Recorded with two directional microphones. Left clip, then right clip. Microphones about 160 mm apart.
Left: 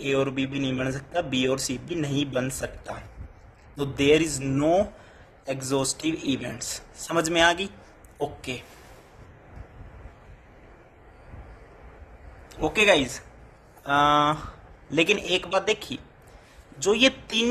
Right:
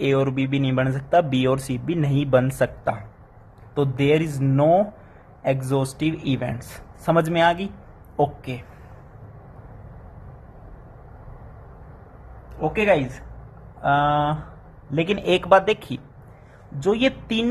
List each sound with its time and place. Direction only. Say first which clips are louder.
0.1 s speech: left 1 dB; 20° left (ahead or behind)
12.5 s speech: right 1 dB; 35° left (ahead or behind)
13.8 s mantra: right 1 dB; 40° left (ahead or behind)
14.9 s speech: right 1 dB; 35° left (ahead or behind)
15.4 s speech: right 8 dB; 20° left (ahead or behind)
16.8 s speech: even; 35° left (ahead or behind)